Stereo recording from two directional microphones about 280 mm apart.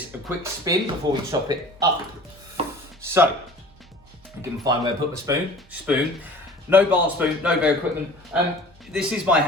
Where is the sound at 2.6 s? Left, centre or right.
Centre.